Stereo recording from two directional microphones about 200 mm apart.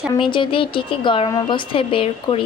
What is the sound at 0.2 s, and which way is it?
Speech, 25° left (ahead or behind).